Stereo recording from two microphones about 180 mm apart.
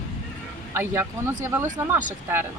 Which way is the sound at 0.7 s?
15° right (ahead or behind).